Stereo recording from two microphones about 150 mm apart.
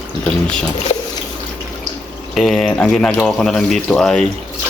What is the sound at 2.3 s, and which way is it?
Speech, centre (ahead or behind).